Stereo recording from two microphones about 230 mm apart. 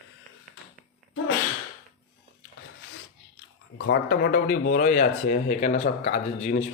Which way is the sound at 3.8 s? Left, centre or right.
Left.